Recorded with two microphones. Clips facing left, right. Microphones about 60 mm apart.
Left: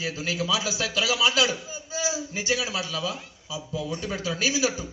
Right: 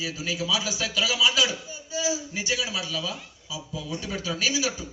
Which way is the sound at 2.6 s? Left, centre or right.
Left.